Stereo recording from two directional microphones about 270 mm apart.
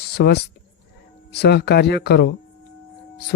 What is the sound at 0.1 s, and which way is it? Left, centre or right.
Speech, left.